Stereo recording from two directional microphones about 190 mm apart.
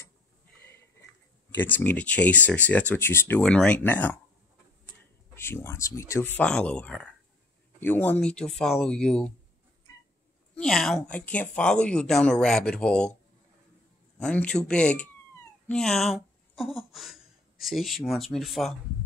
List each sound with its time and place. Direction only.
1.5 s speech: 10° left (ahead or behind)
5.3 s speech: 10° left (ahead or behind)
10.6 s speech: centre (ahead or behind)